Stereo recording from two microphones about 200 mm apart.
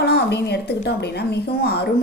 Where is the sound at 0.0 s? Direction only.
55° left (ahead or behind).